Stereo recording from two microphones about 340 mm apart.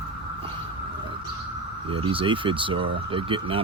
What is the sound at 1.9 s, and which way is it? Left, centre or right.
Speech, centre.